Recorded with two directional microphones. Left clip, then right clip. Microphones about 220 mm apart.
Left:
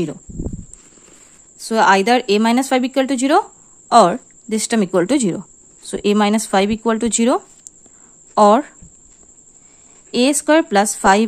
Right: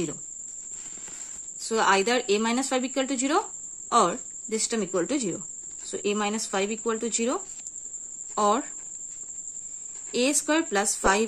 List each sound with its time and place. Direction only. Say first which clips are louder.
1.6 s a woman's voice: left 9 dB; 35° left (ahead or behind)
10.1 s a woman's voice: left 10 dB; 35° left (ahead or behind)